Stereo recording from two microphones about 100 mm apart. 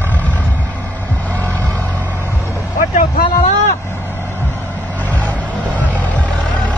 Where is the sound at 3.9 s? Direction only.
15° left (ahead or behind).